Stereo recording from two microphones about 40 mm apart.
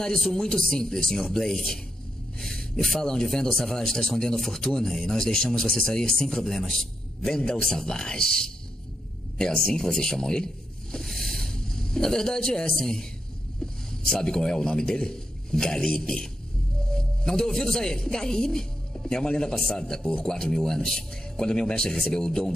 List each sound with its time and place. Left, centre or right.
0.2 s a man's voice: centre
16.8 s a man's voice: centre